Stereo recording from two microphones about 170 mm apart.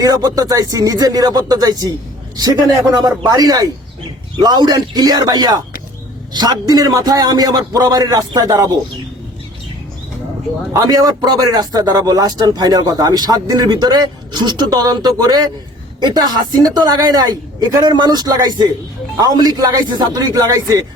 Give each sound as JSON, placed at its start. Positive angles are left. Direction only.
{"t": 0.0, "sound": "a man's voice", "side_deg": -20}
{"t": 3.2, "sound": "a man's voice", "side_deg": -25}
{"t": 10.8, "sound": "a man's voice", "side_deg": -20}